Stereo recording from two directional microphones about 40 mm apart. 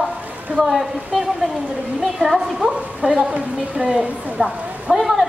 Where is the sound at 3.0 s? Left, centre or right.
Right.